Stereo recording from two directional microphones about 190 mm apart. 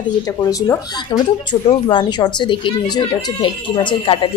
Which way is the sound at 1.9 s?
25° left (ahead or behind).